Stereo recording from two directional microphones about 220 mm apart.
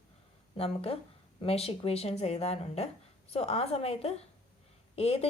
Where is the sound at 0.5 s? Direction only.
25° left (ahead or behind).